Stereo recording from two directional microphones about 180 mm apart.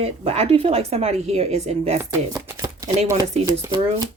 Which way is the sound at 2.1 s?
15° right (ahead or behind).